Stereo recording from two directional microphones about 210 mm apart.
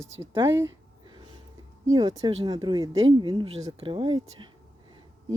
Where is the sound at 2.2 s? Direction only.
20° right (ahead or behind).